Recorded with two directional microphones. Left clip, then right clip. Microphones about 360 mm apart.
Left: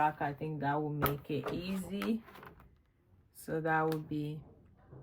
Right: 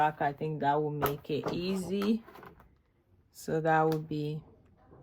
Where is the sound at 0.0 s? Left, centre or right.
Right.